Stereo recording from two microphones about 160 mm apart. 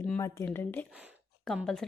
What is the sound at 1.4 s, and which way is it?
Speech, centre (ahead or behind).